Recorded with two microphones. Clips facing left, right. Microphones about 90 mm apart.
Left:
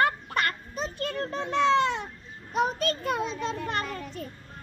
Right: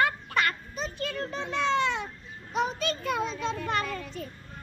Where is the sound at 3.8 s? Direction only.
25° left (ahead or behind).